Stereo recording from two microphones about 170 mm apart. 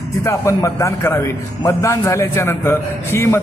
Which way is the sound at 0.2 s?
15° left (ahead or behind).